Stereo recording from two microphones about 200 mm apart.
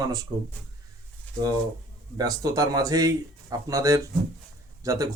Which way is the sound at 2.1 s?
20° right (ahead or behind).